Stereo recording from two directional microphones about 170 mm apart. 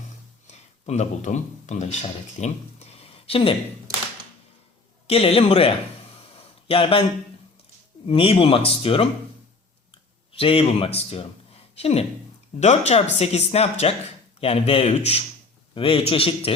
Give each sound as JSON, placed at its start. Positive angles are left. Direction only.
{"t": 0.4, "sound": "speech", "side_deg": 40}
{"t": 5.0, "sound": "speech", "side_deg": 35}
{"t": 6.3, "sound": "a sound", "side_deg": 35}
{"t": 8.0, "sound": "speech", "side_deg": 35}
{"t": 10.3, "sound": "speech", "side_deg": 35}